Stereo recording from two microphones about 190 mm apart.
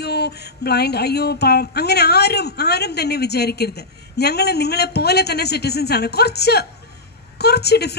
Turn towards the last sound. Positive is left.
turn(degrees=60)  # may be behind; listen again after turning